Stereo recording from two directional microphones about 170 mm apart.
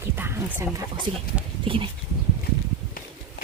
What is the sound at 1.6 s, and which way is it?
Livestock, 30° right (ahead or behind).